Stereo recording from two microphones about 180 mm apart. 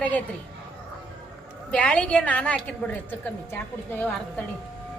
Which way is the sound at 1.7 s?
5° left (ahead or behind).